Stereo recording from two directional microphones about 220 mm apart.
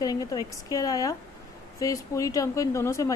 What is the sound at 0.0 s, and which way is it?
Speech, 15° left (ahead or behind).